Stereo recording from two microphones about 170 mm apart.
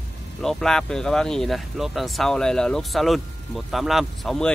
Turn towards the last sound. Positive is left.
turn(degrees=0)  # may be behind; listen again after turning